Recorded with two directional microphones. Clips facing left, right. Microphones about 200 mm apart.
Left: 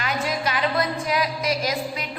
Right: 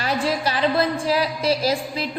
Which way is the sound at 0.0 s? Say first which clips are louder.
Right 3 dB; 35° right (ahead or behind).